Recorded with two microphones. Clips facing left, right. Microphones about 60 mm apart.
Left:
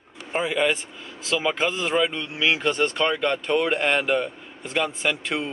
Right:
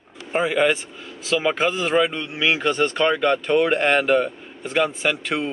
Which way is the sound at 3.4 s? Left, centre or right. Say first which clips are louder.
Right 2 dB; centre.